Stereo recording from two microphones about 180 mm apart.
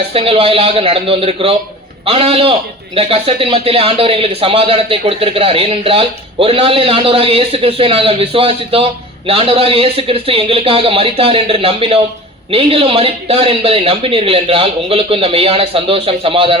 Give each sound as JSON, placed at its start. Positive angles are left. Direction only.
{"t": 0.1, "sound": "a man's voice", "side_deg": -30}